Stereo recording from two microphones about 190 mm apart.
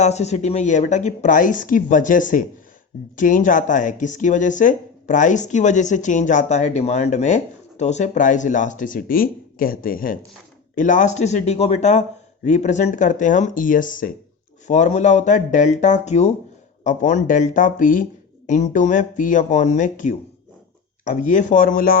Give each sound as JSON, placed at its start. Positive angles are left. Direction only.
{"t": 0.0, "sound": "speech", "side_deg": 35}